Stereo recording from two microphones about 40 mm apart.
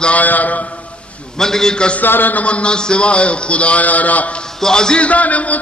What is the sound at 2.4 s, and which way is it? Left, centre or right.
A man's voice, left.